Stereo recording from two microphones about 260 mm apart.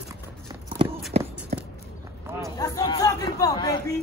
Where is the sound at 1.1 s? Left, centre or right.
Right.